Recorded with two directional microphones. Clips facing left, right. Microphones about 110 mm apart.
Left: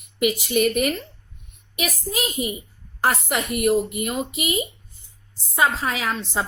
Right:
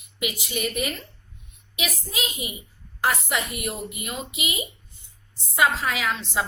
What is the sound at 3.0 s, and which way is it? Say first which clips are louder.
A woman's voice: left 3 dB; 55° left (ahead or behind).